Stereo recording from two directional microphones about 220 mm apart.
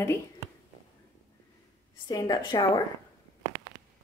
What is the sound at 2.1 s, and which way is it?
Speech, 15° left (ahead or behind).